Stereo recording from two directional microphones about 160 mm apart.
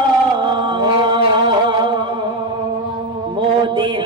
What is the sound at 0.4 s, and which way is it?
Music, 30° right (ahead or behind).